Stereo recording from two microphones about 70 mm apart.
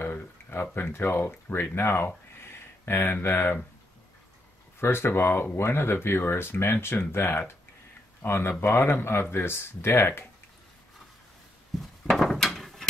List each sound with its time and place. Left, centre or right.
0.0 s speech: left
4.7 s speech: left
11.8 s a sound: centre